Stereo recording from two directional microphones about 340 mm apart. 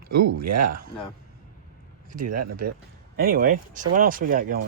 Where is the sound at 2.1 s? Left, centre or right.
Right.